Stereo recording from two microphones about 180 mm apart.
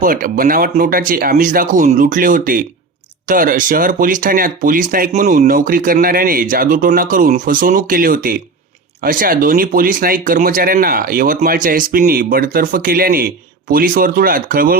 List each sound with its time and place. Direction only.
0.0 s speech: 50° right (ahead or behind)